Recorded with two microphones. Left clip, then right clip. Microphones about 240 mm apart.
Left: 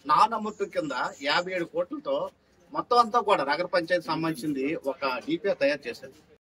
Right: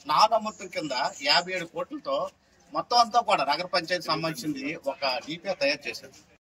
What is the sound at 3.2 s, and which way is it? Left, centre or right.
Speech, centre.